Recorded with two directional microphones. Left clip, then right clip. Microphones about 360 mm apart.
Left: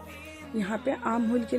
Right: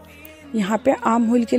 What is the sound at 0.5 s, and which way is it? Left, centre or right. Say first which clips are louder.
A man's voice: right 11 dB; centre.